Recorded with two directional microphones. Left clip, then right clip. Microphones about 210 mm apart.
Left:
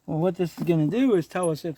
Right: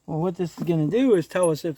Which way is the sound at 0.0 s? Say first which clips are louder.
Left 2 dB; 15° left (ahead or behind).